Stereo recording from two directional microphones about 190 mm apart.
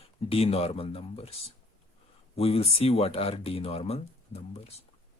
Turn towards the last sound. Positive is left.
turn(degrees=30)  # may be behind; listen again after turning